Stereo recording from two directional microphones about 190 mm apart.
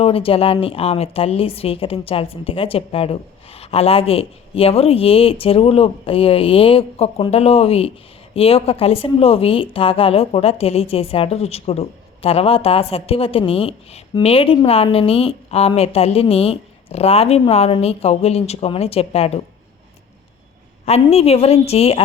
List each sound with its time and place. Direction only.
0.0 s a woman's voice: 30° left (ahead or behind)
20.8 s a woman's voice: 35° left (ahead or behind)